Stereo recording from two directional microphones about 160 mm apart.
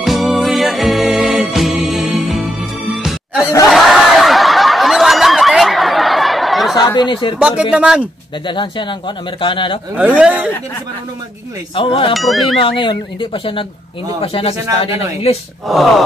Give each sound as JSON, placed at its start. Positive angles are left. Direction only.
{"t": 0.0, "sound": "music", "side_deg": 0}
{"t": 3.7, "sound": "snicker", "side_deg": 0}
{"t": 6.7, "sound": "speech", "side_deg": 25}
{"t": 7.3, "sound": "speech", "side_deg": -5}
{"t": 8.5, "sound": "speech", "side_deg": 30}
{"t": 9.9, "sound": "speech", "side_deg": -5}
{"t": 11.7, "sound": "speech", "side_deg": 35}
{"t": 12.1, "sound": "speech", "side_deg": 0}
{"t": 12.5, "sound": "speech", "side_deg": 30}
{"t": 15.7, "sound": "speech", "side_deg": 0}